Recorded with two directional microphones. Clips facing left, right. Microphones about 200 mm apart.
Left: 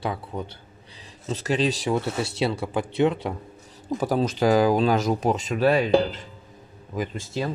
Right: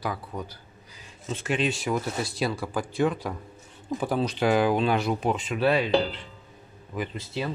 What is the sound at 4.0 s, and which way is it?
Speech, 45° left (ahead or behind).